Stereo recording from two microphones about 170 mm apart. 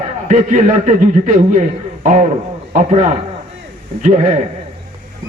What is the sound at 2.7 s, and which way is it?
A man's voice, 45° right (ahead or behind).